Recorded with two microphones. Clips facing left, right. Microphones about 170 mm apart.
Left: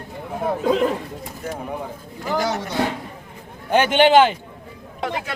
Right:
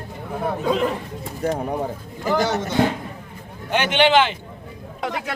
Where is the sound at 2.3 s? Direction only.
Centre (ahead or behind).